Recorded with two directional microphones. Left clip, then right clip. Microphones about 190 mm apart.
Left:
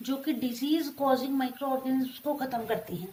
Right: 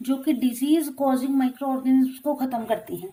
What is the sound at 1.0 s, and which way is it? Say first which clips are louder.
Speech: right 4 dB; 35° right (ahead or behind).